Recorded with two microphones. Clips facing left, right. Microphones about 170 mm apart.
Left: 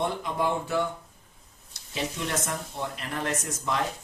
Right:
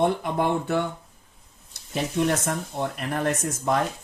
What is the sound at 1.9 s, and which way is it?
Speech, 55° right (ahead or behind).